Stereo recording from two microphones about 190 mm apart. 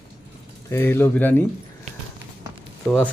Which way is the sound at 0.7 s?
10° left (ahead or behind).